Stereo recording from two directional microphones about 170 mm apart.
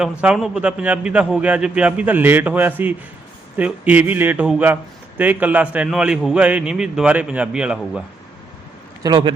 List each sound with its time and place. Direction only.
0.0 s a man's voice: 5° right (ahead or behind)
9.0 s a man's voice: 30° right (ahead or behind)